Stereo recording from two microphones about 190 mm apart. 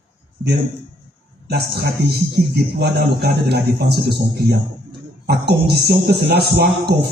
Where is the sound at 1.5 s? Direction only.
55° right (ahead or behind).